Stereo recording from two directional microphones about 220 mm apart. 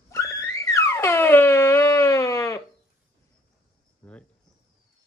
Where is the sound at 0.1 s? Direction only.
15° left (ahead or behind).